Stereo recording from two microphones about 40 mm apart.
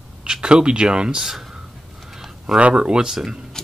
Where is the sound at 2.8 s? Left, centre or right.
Centre.